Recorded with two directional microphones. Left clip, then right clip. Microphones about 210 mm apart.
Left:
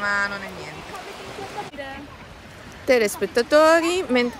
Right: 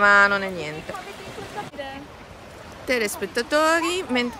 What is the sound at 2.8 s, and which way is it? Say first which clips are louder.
Speech: left 5 dB; 5° right (ahead or behind).